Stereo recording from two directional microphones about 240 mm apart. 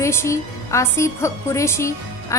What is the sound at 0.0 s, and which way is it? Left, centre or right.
A woman's voice, centre.